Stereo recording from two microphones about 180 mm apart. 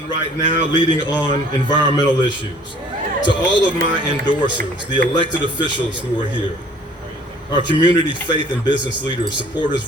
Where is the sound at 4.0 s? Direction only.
25° right (ahead or behind).